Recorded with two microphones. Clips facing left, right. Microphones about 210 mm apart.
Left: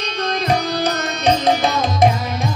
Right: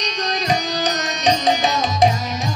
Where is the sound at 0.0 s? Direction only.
55° left (ahead or behind).